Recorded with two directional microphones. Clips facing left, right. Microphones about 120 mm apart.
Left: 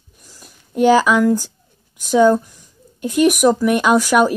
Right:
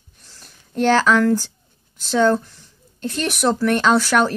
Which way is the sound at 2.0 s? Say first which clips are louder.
Left 4 dB; 10° left (ahead or behind).